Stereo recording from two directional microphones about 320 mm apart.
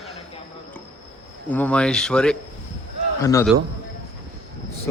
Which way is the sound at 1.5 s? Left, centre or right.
Centre.